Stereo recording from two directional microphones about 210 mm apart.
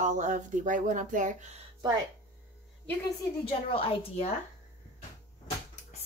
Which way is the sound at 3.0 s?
25° left (ahead or behind).